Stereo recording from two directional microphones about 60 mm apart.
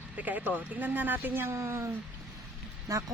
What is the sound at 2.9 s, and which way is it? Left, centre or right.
Speech, right.